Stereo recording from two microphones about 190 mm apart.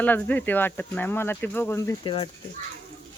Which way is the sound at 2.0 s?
30° left (ahead or behind).